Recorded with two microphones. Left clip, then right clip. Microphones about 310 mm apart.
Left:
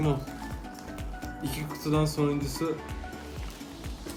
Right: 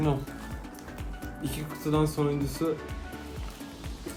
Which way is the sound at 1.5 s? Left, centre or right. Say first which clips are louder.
Even; centre.